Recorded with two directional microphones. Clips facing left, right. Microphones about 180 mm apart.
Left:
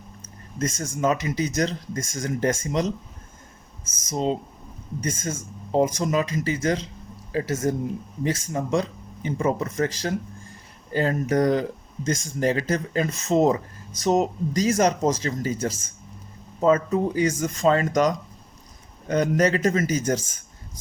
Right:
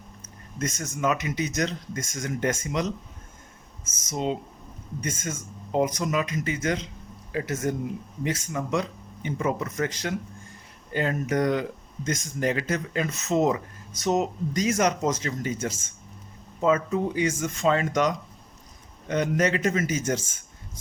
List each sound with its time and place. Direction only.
0.2 s a sound: 30° left (ahead or behind)
1.0 s speech: 30° left (ahead or behind)
4.1 s speech: 35° left (ahead or behind)